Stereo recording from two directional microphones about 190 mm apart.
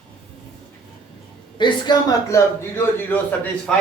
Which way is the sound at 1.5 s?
25° left (ahead or behind).